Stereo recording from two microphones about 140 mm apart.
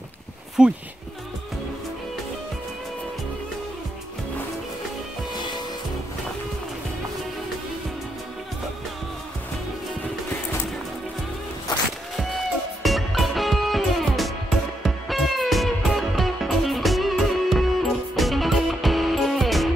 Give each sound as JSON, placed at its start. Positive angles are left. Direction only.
{"t": 0.6, "sound": "speech", "side_deg": -5}
{"t": 5.3, "sound": "music", "side_deg": 30}
{"t": 12.8, "sound": "music", "side_deg": 0}